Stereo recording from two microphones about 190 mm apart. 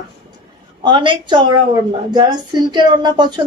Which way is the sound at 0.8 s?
25° right (ahead or behind).